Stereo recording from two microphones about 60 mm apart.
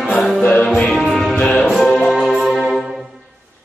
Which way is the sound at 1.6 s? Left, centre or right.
Centre.